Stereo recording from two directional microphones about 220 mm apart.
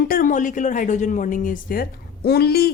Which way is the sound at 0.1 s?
40° left (ahead or behind).